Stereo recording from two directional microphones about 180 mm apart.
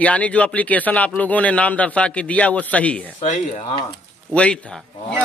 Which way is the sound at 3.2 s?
35° left (ahead or behind).